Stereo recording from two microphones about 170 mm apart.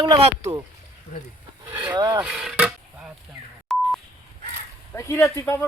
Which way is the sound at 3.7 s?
Centre (ahead or behind).